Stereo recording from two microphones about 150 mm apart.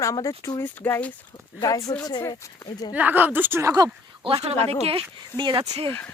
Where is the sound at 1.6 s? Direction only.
25° left (ahead or behind).